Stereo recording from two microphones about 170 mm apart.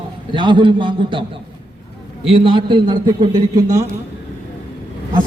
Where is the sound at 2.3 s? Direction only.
30° right (ahead or behind).